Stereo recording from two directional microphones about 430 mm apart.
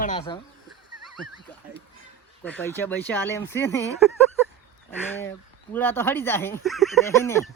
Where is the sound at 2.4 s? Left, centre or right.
Centre.